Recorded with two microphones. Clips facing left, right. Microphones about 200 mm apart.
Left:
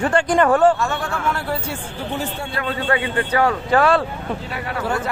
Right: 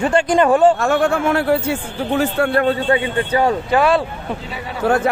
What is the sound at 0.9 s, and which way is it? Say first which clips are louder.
Speech: right 10 dB; 50° right (ahead or behind).